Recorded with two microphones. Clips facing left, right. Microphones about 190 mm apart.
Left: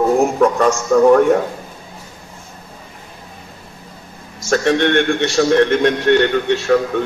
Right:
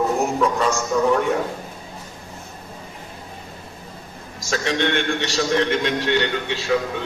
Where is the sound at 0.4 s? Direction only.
55° left (ahead or behind).